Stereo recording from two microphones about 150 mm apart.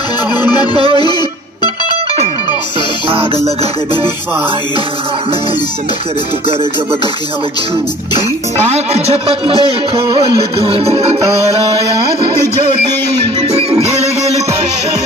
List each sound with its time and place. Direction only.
0.3 s music: 30° left (ahead or behind)
8.5 s a man's voice: 45° right (ahead or behind)
9.7 s music: 35° right (ahead or behind)
13.2 s music: 40° right (ahead or behind)